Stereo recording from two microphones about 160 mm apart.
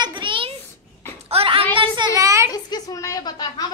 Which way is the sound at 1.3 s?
35° right (ahead or behind).